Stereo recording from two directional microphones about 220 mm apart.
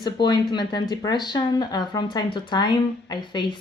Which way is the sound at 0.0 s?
20° left (ahead or behind).